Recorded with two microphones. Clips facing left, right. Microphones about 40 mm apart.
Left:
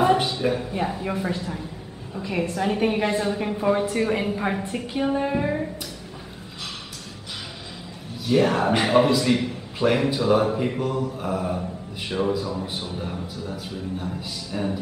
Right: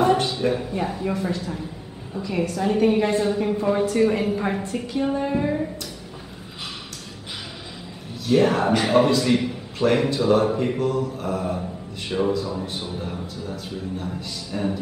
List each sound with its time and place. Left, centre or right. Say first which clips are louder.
0.0 s a man's voice: even; centre
8.3 s a man's voice: right 1 dB; centre